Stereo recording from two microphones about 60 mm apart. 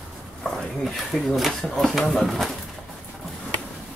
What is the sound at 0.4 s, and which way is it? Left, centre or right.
Speech, centre.